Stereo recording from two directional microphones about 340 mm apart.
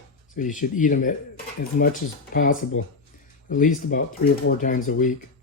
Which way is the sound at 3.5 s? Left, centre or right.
Left.